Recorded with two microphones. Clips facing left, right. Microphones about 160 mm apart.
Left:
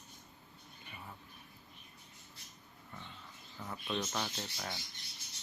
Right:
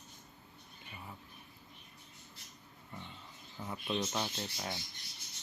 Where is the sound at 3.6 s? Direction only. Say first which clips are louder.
Right 2 dB; 20° right (ahead or behind).